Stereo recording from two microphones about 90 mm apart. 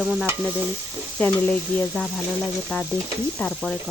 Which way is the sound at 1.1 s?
15° left (ahead or behind).